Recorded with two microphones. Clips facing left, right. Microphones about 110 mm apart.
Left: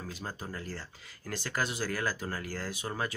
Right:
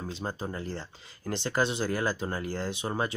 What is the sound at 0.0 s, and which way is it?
Speech, 25° right (ahead or behind).